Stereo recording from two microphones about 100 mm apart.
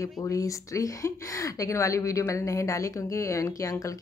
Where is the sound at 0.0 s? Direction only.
35° left (ahead or behind).